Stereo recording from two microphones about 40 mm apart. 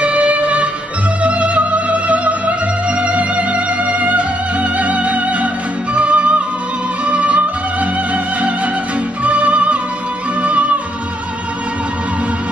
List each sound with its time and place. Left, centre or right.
0.0 s music: right